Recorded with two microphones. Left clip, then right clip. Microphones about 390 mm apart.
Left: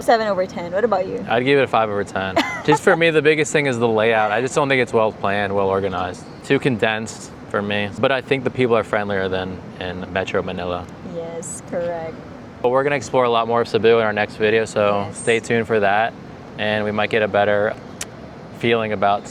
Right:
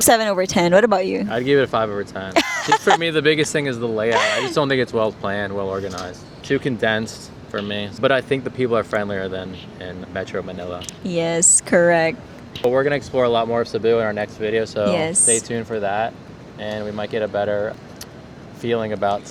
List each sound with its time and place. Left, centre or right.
0.0 s speech: right
1.3 s speech: centre
2.3 s speech: right
2.8 s speech: centre
11.1 s speech: right
12.6 s speech: centre